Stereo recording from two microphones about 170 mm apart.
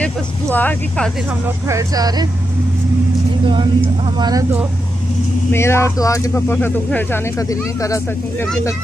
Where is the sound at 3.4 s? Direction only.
30° right (ahead or behind).